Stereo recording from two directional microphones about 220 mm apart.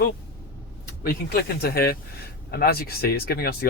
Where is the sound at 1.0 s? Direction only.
45° left (ahead or behind).